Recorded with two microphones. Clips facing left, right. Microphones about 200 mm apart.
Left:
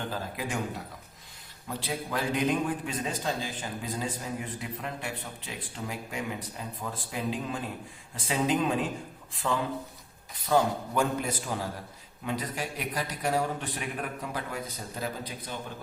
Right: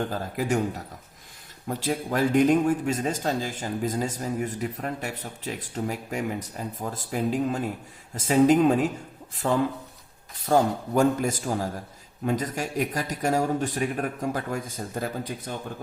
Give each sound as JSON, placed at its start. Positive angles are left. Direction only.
{"t": 0.3, "sound": "a man's voice", "side_deg": -40}
{"t": 1.6, "sound": "a man's voice", "side_deg": -45}